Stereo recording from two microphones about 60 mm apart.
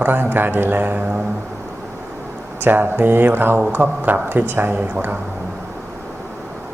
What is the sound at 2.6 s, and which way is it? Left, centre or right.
Speech, right.